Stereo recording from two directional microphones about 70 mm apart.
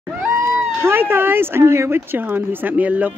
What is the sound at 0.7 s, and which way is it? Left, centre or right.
Speech, right.